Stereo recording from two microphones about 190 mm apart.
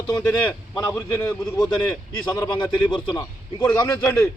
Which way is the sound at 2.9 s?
25° left (ahead or behind).